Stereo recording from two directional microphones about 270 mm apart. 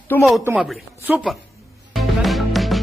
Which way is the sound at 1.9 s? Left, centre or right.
Centre.